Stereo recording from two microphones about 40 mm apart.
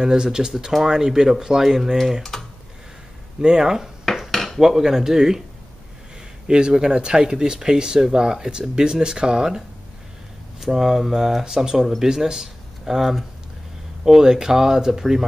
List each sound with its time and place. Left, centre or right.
0.0 s speech: centre
2.3 s typing: centre
3.3 s speech: centre
4.3 s dishes: centre
4.6 s speech: centre
6.4 s speech: centre
10.6 s speech: centre